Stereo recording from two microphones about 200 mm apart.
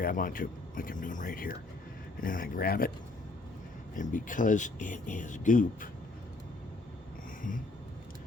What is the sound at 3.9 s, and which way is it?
Speech, 40° left (ahead or behind).